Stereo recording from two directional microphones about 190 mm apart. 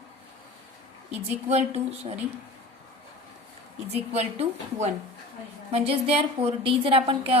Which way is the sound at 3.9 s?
30° right (ahead or behind).